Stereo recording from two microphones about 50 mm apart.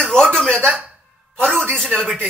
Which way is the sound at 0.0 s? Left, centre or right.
Centre.